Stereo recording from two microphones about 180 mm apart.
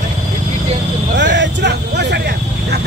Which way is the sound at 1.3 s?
70° right (ahead or behind).